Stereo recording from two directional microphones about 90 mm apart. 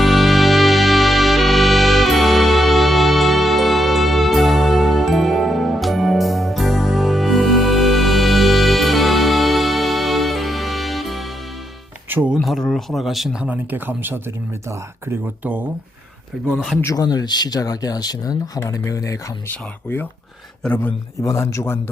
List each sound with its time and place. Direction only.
0.0 s music: centre (ahead or behind)
12.0 s music: 20° right (ahead or behind)
12.4 s a sound: centre (ahead or behind)
13.4 s speech: 20° right (ahead or behind)
16.9 s speech: 45° left (ahead or behind)
19.5 s speech: 20° left (ahead or behind)
21.2 s speech: 30° left (ahead or behind)